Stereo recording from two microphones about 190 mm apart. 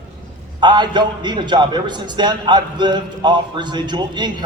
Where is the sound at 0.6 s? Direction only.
25° right (ahead or behind).